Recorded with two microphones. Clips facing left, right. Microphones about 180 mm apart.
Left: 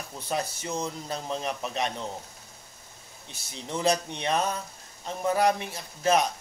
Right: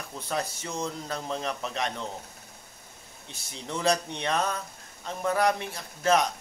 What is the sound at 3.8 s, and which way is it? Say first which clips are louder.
A man's voice: even; 20° left (ahead or behind).